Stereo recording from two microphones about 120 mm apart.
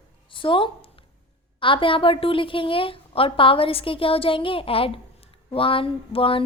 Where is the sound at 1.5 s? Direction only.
45° left (ahead or behind).